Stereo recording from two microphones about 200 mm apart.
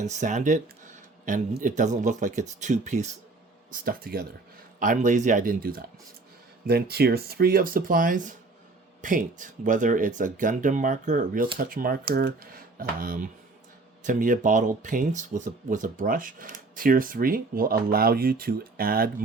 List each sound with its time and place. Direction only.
0.0 s speech: 35° right (ahead or behind)
3.7 s speech: 45° right (ahead or behind)